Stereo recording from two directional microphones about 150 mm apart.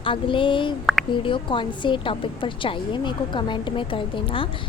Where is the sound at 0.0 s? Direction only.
35° left (ahead or behind).